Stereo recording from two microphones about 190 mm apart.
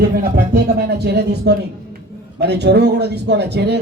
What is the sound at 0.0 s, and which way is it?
Speech, 60° right (ahead or behind).